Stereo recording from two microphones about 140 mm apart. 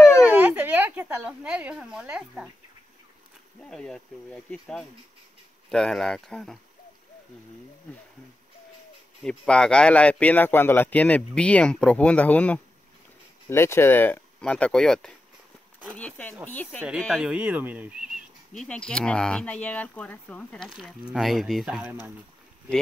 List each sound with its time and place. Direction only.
0.2 s speech: 10° right (ahead or behind)
3.6 s speech: 5° left (ahead or behind)
9.2 s speech: 5° left (ahead or behind)
17.0 s speech: 5° right (ahead or behind)
18.5 s speech: 5° left (ahead or behind)